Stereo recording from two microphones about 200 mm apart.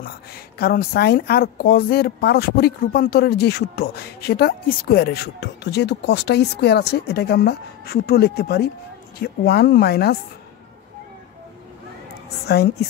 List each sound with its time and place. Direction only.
0.0 s a woman's voice: 50° left (ahead or behind)
12.4 s a woman's voice: 55° left (ahead or behind)